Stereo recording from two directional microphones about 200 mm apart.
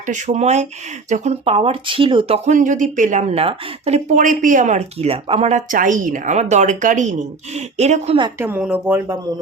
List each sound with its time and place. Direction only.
0.0 s speech: 35° right (ahead or behind)
8.4 s speech: 10° right (ahead or behind)